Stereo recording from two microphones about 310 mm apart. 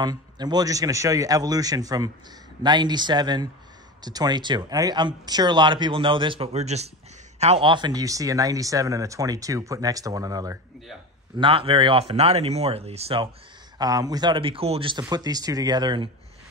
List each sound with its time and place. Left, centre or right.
0.0 s speech: centre